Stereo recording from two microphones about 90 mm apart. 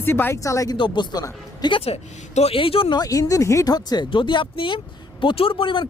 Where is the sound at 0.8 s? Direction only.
55° left (ahead or behind).